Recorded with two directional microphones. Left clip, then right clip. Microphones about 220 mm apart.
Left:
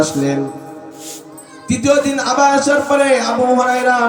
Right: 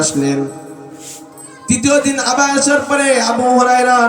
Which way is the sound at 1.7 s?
10° right (ahead or behind).